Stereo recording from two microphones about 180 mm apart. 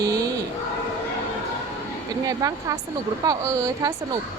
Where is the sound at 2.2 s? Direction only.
20° right (ahead or behind).